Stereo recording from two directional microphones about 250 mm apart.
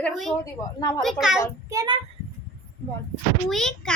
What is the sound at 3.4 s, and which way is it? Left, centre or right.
Speech, centre.